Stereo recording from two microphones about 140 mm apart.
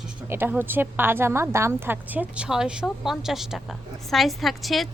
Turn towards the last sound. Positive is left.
turn(degrees=0)  # may be behind; listen again after turning